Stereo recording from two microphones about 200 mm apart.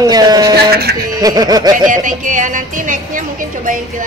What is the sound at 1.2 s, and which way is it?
Speech, 20° right (ahead or behind).